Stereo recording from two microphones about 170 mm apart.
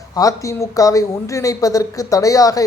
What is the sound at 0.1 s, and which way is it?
A man's voice, 20° left (ahead or behind).